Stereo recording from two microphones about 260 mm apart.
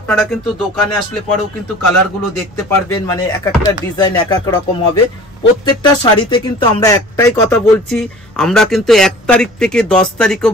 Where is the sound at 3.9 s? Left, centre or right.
Centre.